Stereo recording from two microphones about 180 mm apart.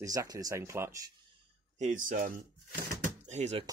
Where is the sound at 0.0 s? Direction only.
20° right (ahead or behind).